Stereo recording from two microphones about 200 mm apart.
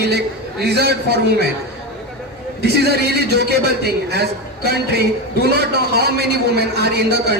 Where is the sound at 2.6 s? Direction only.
55° right (ahead or behind).